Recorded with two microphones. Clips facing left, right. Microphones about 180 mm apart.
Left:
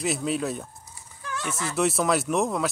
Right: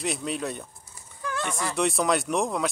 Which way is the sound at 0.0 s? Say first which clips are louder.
Left 3 dB; centre (ahead or behind).